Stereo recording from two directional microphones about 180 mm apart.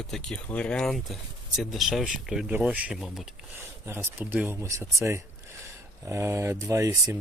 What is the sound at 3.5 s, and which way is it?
Speech, 15° right (ahead or behind).